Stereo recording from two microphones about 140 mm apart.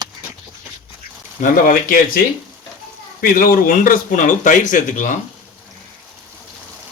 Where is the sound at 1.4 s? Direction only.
80° left.